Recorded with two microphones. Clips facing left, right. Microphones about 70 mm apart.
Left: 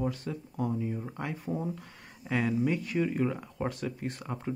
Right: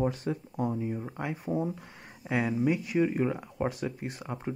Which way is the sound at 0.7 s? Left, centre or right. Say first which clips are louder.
Right 1 dB; centre.